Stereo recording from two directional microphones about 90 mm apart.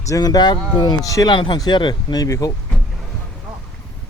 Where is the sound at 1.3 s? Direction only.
60° left (ahead or behind).